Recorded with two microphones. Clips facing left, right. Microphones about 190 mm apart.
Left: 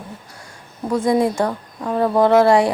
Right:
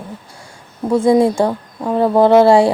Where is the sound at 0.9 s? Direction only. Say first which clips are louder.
Right 5 dB; 25° right (ahead or behind).